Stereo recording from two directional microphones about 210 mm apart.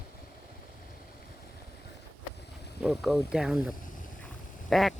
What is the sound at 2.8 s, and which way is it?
Speech, centre (ahead or behind).